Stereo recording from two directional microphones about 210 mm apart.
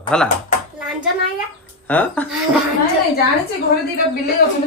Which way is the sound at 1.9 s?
10° left (ahead or behind).